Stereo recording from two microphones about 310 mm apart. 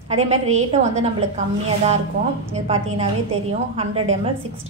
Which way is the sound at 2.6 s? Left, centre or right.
Centre.